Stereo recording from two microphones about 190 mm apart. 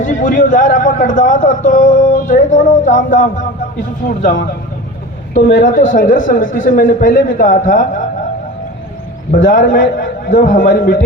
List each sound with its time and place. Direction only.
0.0 s a man's voice: 40° left (ahead or behind)
5.5 s a man's voice: 50° left (ahead or behind)
9.5 s a man's voice: 45° left (ahead or behind)